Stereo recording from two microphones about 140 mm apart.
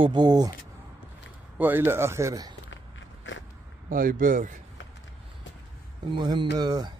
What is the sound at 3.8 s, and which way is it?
Speech, 80° right.